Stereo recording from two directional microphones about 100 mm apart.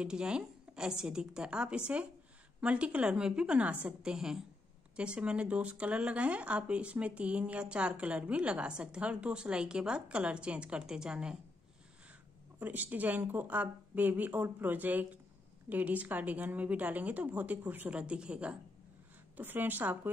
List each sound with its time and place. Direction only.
0.0 s speech: 10° right (ahead or behind)
12.5 s speech: 15° right (ahead or behind)